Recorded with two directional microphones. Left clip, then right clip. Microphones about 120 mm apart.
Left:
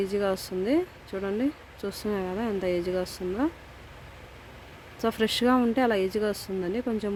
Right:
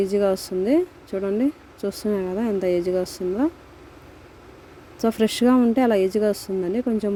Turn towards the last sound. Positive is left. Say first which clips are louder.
# right 6 dB
turn(degrees=-25)  # may be behind; listen again after turning